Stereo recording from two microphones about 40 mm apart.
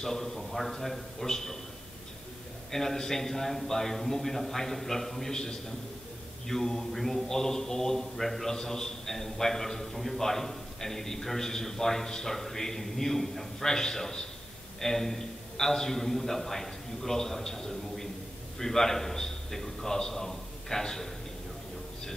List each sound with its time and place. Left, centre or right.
0.0 s a man's voice: centre
2.7 s a man's voice: centre